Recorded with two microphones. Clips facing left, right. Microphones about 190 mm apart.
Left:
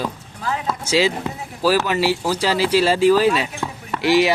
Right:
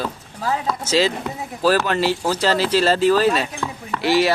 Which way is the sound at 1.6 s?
10° left (ahead or behind).